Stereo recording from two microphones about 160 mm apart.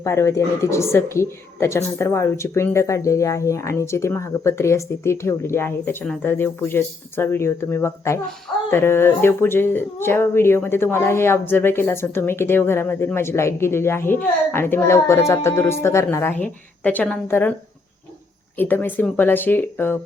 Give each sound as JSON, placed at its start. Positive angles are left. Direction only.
{"t": 0.0, "sound": "speech", "side_deg": 15}
{"t": 18.5, "sound": "speech", "side_deg": 10}